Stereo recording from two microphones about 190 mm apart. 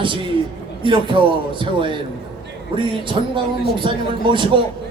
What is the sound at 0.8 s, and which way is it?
A man's voice, 25° right (ahead or behind).